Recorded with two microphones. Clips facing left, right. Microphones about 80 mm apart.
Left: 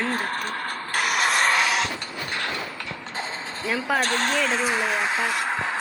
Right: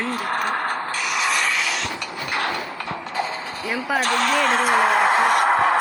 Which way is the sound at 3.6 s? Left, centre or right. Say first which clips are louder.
Even; centre.